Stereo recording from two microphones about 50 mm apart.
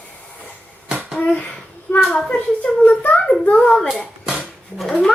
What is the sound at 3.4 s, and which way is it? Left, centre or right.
Speech, left.